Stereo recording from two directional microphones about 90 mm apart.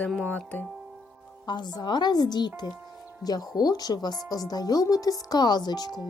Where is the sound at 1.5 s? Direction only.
55° left (ahead or behind).